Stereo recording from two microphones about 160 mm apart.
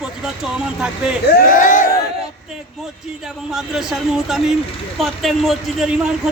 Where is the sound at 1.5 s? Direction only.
55° left (ahead or behind).